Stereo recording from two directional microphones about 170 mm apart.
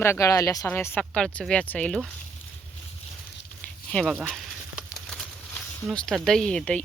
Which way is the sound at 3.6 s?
5° left (ahead or behind).